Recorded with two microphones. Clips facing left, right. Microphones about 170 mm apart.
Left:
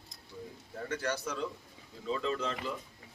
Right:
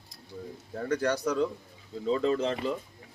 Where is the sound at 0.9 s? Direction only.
40° right (ahead or behind).